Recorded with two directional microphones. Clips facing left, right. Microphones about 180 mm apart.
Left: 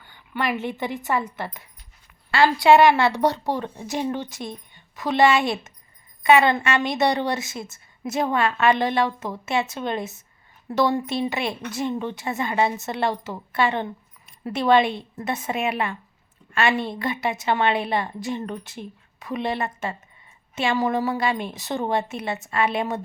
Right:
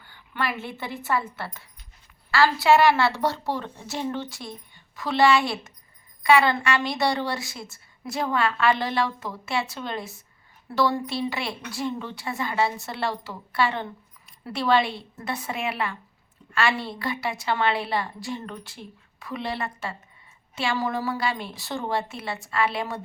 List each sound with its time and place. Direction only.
0.0 s a woman's voice: 15° left (ahead or behind)